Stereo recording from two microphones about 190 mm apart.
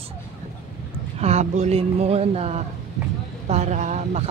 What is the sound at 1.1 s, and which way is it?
Speech, 35° right (ahead or behind).